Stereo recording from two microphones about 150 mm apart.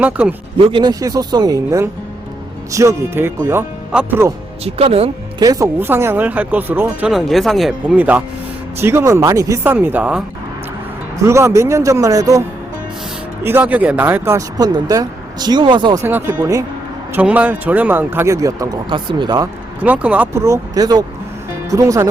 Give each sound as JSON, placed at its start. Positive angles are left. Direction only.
{"t": 0.0, "sound": "speech", "side_deg": -10}
{"t": 0.7, "sound": "speech", "side_deg": -30}
{"t": 4.6, "sound": "speech", "side_deg": -40}
{"t": 5.4, "sound": "speech", "side_deg": -25}
{"t": 7.1, "sound": "speech", "side_deg": 0}
{"t": 9.7, "sound": "speech", "side_deg": -10}
{"t": 11.2, "sound": "speech", "side_deg": -20}
{"t": 16.0, "sound": "speech", "side_deg": -15}
{"t": 17.2, "sound": "speech", "side_deg": -10}
{"t": 18.9, "sound": "speech", "side_deg": -35}
{"t": 19.8, "sound": "speech", "side_deg": -10}